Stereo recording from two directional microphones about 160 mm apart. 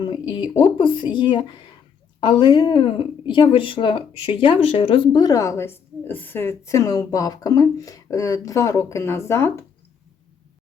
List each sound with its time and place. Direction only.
0.0 s speech: 30° left (ahead or behind)